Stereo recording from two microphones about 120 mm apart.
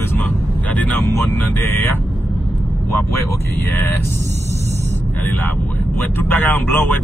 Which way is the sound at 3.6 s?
20° left (ahead or behind).